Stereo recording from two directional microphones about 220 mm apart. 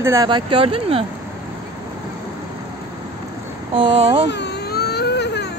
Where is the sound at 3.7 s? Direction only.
25° right (ahead or behind).